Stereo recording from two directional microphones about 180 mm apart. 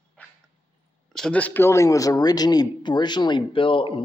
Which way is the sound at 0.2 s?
10° left (ahead or behind).